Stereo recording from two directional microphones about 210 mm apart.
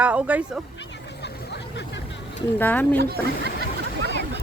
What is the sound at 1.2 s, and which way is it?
Hubbub, 55° left (ahead or behind).